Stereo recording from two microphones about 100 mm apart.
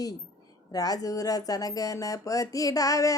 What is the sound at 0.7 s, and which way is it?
Speech, 40° left (ahead or behind).